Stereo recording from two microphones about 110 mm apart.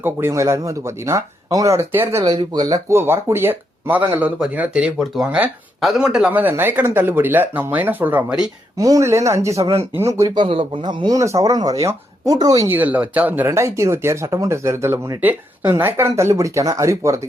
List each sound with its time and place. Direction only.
0.0 s speech: 25° right (ahead or behind)
2.2 s speech: 40° right (ahead or behind)
3.0 s speech: 20° right (ahead or behind)
8.8 s speech: 30° right (ahead or behind)
10.2 s speech: 45° right (ahead or behind)
11.2 s speech: 30° right (ahead or behind)
12.6 s speech: 15° right (ahead or behind)
13.6 s speech: 25° right (ahead or behind)